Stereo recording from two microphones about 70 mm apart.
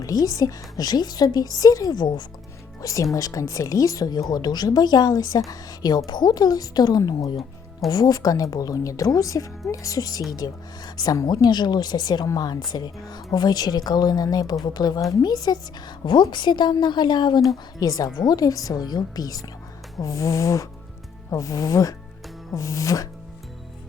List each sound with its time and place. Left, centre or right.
0.0 s a woman's voice: left
2.0 s a woman's voice: left
2.8 s a sound: left
3.2 s a woman's voice: left
6.1 s a woman's voice: left
10.3 s speech: left
12.7 s speech: left
16.3 s a woman's voice: left
17.7 s a woman's voice: left
20.0 s a sound: left
21.2 s a woman's voice: left
22.5 s a sound: left